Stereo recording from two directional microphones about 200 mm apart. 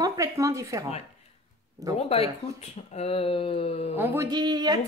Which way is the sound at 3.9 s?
15° right (ahead or behind).